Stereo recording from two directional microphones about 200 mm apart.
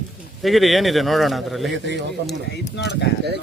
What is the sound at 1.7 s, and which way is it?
Speech, 60° right (ahead or behind).